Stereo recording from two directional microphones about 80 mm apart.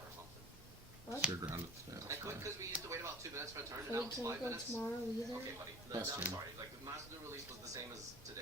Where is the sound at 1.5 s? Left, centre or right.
Right.